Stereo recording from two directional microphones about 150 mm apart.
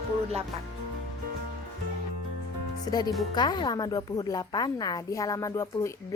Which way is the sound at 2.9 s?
25° left (ahead or behind).